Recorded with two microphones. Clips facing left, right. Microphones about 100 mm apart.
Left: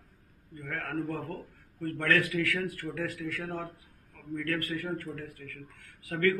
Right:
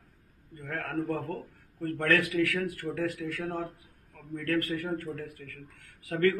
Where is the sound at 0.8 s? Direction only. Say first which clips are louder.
Right 2 dB; 40° right (ahead or behind).